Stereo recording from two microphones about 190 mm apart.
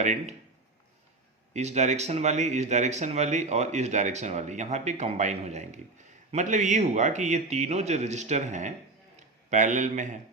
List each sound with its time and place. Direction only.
0.0 s speech: 40° right (ahead or behind)
1.5 s a man's voice: 35° right (ahead or behind)